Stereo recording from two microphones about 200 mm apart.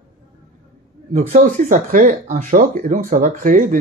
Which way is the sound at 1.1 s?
35° right (ahead or behind).